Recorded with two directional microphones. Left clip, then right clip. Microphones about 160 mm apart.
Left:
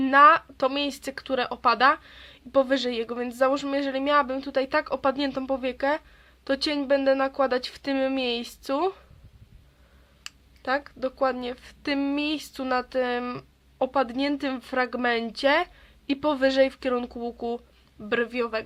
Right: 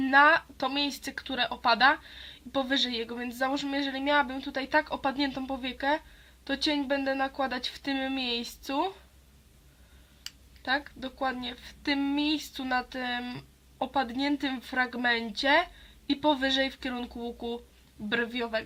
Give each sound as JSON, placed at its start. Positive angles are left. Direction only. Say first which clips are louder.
{"t": 0.0, "sound": "a woman's voice", "louder": "left 5 dB", "side_deg": 25}
{"t": 10.6, "sound": "a woman's voice", "louder": "left 4 dB", "side_deg": 30}